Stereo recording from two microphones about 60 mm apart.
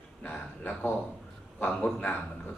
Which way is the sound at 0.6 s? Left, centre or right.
Left.